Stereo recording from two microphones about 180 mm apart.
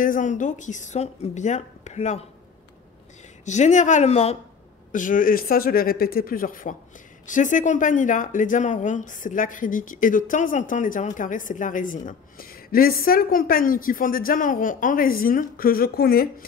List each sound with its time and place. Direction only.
0.0 s speech: 45° left (ahead or behind)
3.4 s a woman's voice: 40° left (ahead or behind)
4.9 s speech: 45° left (ahead or behind)